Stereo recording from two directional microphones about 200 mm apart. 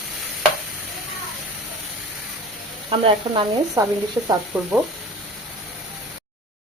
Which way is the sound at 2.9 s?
25° right (ahead or behind).